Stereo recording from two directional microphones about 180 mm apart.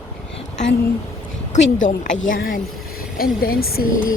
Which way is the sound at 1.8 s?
45° left (ahead or behind).